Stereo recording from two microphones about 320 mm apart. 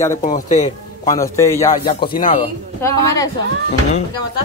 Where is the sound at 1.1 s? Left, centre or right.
Centre.